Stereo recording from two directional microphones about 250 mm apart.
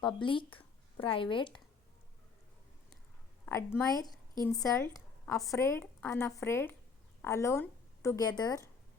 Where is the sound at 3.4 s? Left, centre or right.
Centre.